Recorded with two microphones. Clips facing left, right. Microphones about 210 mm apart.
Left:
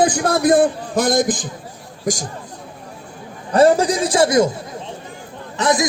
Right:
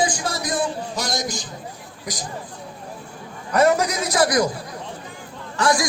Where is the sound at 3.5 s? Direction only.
30° left (ahead or behind).